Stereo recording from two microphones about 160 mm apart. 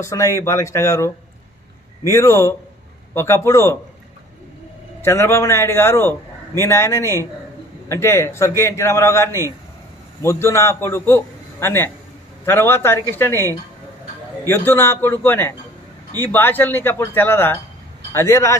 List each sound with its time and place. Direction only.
0.0 s a man's voice: 20° left (ahead or behind)
5.0 s a man's voice: 15° left (ahead or behind)